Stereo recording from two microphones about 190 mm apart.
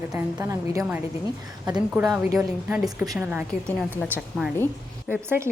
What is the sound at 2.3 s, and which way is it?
A woman's voice, 5° right (ahead or behind).